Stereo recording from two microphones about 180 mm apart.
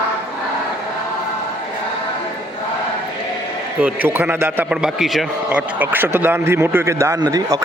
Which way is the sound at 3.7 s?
10° right (ahead or behind).